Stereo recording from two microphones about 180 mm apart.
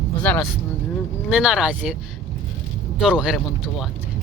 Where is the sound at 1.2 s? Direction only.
5° right (ahead or behind).